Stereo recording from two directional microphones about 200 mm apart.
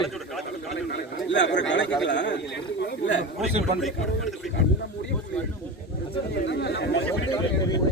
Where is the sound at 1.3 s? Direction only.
60° left (ahead or behind).